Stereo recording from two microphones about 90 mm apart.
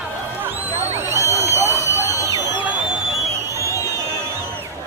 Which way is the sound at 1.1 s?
35° right (ahead or behind).